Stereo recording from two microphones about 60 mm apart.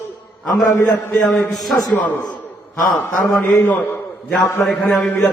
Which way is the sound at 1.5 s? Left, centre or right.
Centre.